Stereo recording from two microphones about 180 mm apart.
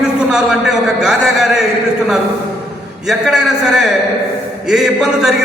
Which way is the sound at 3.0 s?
Centre (ahead or behind).